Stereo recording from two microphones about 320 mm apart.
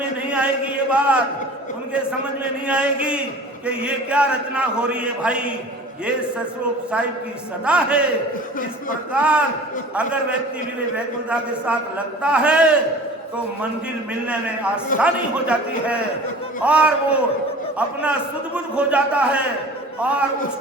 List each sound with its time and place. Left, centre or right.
0.3 s a man's voice: centre
9.1 s a man's voice: centre
14.3 s a man's voice: centre